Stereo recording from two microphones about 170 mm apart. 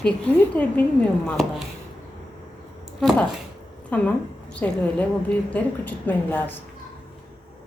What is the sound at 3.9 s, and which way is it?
A woman's voice, 10° left (ahead or behind).